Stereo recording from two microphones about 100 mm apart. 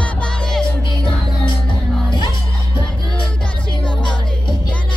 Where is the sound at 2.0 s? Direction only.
50° left (ahead or behind).